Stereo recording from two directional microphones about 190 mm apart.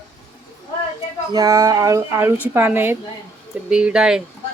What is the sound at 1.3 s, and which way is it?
A woman's voice, 15° right (ahead or behind).